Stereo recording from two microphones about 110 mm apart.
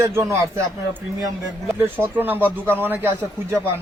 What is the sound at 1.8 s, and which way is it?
Speech, 20° right (ahead or behind).